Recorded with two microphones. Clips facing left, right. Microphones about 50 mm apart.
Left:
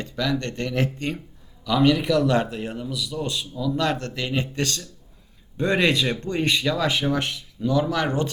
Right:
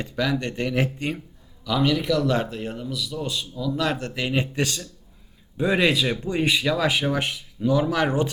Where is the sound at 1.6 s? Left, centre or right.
Centre.